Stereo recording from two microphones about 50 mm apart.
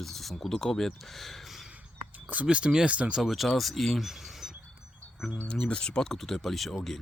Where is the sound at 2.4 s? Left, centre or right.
Centre.